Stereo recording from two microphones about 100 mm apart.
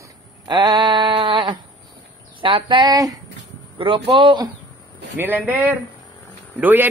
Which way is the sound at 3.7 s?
60° right (ahead or behind).